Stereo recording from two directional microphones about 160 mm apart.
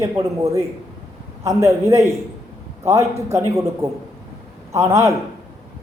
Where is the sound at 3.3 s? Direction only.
20° right (ahead or behind).